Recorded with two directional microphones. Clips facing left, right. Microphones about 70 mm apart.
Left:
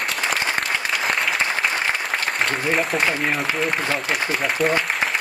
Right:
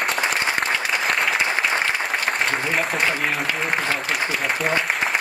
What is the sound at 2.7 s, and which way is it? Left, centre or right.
Speech, centre.